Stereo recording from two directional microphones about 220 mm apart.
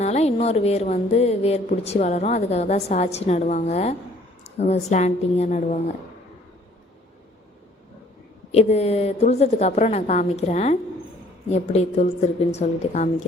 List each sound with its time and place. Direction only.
0.0 s a woman's voice: 30° left (ahead or behind)
8.5 s a woman's voice: 30° left (ahead or behind)